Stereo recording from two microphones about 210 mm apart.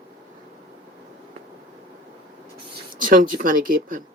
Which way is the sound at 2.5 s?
40° right (ahead or behind).